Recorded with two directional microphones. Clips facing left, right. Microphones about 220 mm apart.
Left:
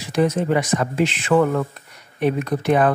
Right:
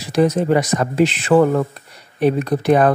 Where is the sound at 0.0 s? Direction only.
35° right (ahead or behind).